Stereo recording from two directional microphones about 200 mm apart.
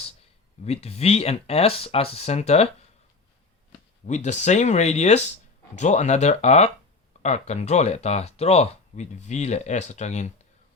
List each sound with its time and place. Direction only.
0.6 s speech: 30° left (ahead or behind)
4.0 s speech: 35° left (ahead or behind)